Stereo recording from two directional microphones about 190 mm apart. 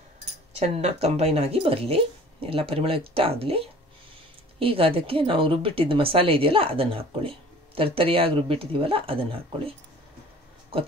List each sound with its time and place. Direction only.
0.6 s speech: 35° right (ahead or behind)